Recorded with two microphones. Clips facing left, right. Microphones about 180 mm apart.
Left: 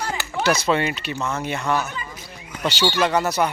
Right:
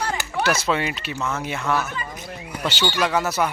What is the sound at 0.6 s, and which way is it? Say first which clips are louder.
Speech: left 2 dB; 5° right (ahead or behind).